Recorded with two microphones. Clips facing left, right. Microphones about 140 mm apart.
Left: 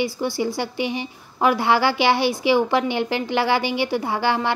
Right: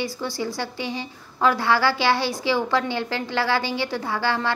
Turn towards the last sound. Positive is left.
turn(degrees=15)  # may be behind; listen again after turning